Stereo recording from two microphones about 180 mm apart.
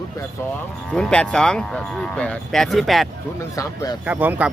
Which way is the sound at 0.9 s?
5° left (ahead or behind).